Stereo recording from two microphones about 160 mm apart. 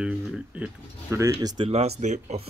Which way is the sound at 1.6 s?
40° right (ahead or behind).